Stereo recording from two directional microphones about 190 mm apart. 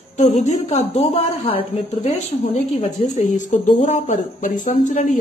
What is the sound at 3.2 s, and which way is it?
Speech, 40° left (ahead or behind).